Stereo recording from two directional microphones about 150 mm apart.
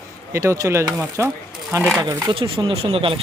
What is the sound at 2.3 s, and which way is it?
Speech, 35° right (ahead or behind).